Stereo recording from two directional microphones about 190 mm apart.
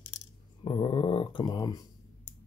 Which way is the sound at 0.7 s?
25° left (ahead or behind).